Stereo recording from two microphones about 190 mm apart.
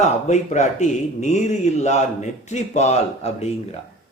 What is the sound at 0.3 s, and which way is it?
A man's voice, 40° left (ahead or behind).